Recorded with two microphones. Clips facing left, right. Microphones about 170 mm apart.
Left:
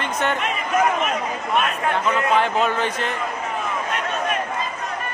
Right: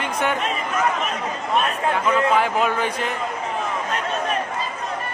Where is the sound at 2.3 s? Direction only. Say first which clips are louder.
Even; 10° right (ahead or behind).